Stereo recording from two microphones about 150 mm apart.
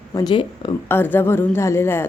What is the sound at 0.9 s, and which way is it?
A woman's voice, 15° left (ahead or behind).